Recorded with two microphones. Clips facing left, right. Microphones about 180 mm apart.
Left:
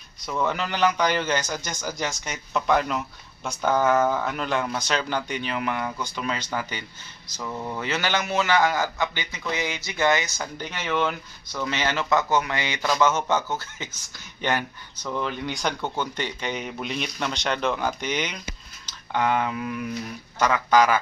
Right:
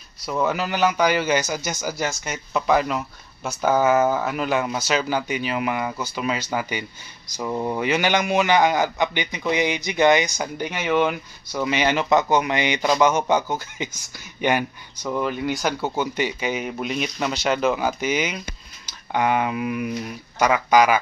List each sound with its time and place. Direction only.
0.2 s a man's voice: 5° right (ahead or behind)
7.4 s speech: 30° right (ahead or behind)
7.8 s a man's voice: 15° right (ahead or behind)